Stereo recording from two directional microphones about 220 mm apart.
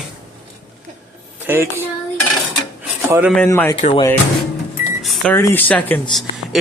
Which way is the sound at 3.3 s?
10° left (ahead or behind).